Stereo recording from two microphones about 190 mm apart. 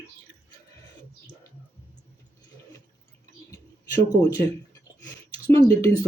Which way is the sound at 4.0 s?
15° left (ahead or behind).